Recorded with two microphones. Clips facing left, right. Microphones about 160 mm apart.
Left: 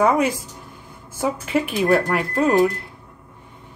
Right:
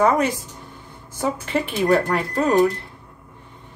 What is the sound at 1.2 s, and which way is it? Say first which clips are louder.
Speech: left 1 dB; 10° left (ahead or behind).